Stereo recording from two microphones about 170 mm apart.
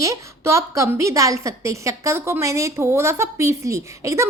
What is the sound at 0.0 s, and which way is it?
A woman's voice, 20° right (ahead or behind).